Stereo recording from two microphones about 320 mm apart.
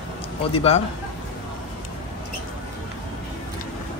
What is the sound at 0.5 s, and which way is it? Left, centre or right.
Speech, centre.